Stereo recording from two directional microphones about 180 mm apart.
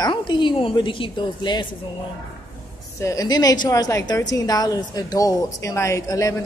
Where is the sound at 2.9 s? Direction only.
20° left (ahead or behind).